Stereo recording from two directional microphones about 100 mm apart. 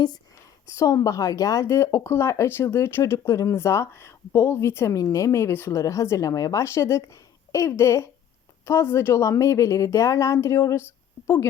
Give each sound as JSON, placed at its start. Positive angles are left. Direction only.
{"t": 0.8, "sound": "a woman's voice", "side_deg": 35}